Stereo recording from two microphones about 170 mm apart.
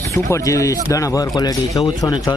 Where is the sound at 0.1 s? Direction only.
15° left (ahead or behind).